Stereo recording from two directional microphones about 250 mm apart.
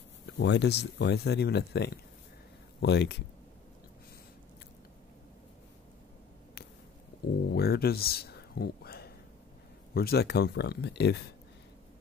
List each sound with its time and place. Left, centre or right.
0.4 s speech: left
7.4 s speech: left